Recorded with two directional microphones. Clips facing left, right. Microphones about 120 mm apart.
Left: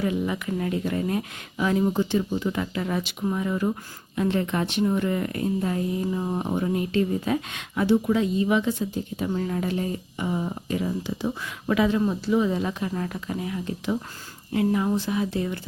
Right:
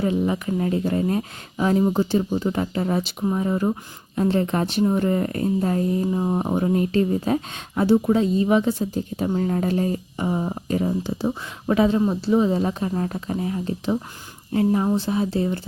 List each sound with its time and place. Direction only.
0.0 s speech: 30° right (ahead or behind)